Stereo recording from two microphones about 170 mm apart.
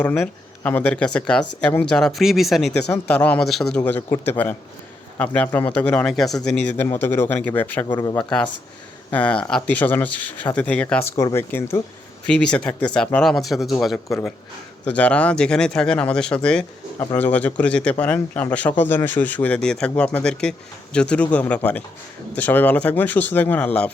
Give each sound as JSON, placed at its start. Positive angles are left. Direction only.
{"t": 0.0, "sound": "speech", "side_deg": 5}
{"t": 3.8, "sound": "speech", "side_deg": 10}
{"t": 7.9, "sound": "speech", "side_deg": 25}
{"t": 9.0, "sound": "speech", "side_deg": 10}
{"t": 14.8, "sound": "speech", "side_deg": 5}